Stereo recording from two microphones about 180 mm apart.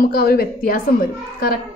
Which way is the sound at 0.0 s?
55° left (ahead or behind).